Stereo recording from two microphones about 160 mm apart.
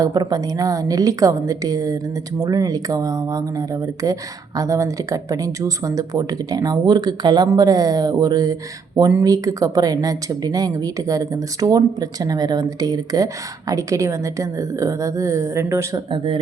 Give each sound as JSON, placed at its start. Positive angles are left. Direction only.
{"t": 0.0, "sound": "speech", "side_deg": -25}
{"t": 16.1, "sound": "speech", "side_deg": -30}